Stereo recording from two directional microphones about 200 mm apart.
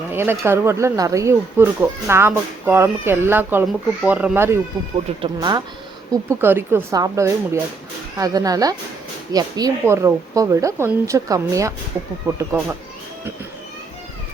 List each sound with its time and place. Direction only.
0.1 s speech: 10° right (ahead or behind)
6.4 s speech: 10° right (ahead or behind)